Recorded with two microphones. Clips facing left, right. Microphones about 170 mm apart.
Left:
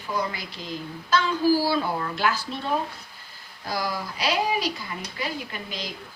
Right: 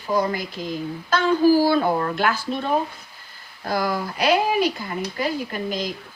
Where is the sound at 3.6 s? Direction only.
55° right (ahead or behind).